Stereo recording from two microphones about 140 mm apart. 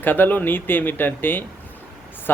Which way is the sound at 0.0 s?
15° left (ahead or behind).